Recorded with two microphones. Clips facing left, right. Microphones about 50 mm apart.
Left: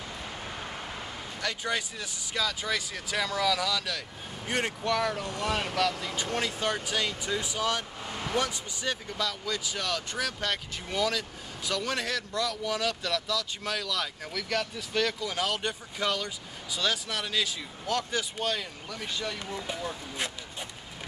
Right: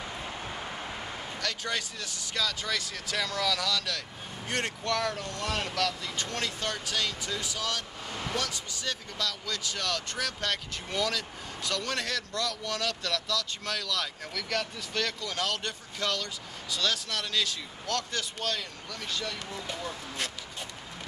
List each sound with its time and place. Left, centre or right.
0.2 s vehicle: centre
1.4 s speech: centre
8.1 s vehicle: centre
8.4 s speech: centre